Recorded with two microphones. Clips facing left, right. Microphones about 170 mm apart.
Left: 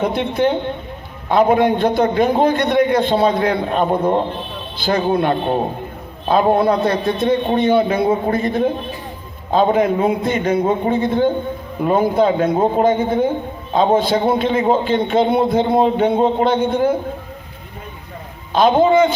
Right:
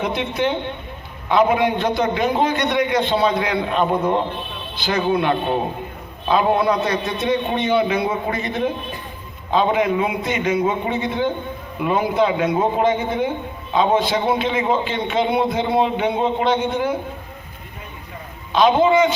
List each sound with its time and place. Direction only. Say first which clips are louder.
0.0 s a man's voice: left 4 dB; 50° left (ahead or behind)
18.5 s a man's voice: left 2 dB; 45° left (ahead or behind)